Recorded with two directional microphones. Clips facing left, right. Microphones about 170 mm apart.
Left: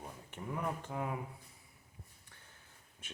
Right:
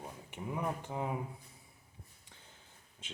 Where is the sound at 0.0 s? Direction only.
15° right (ahead or behind).